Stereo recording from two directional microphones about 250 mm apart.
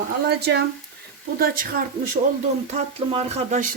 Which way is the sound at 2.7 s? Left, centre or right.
Right.